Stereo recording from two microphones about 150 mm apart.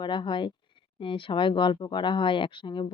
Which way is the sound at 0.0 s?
30° left (ahead or behind).